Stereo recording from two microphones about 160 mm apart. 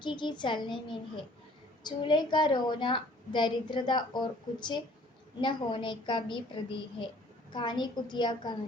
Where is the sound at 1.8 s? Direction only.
30° left (ahead or behind).